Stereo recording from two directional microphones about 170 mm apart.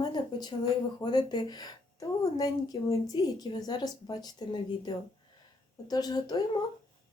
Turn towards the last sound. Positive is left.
turn(degrees=25)  # may be behind; listen again after turning